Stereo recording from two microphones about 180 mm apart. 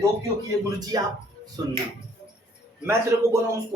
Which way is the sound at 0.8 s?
20° right (ahead or behind).